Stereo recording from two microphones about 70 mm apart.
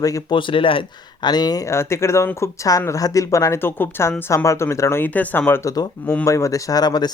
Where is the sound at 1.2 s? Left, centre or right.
Left.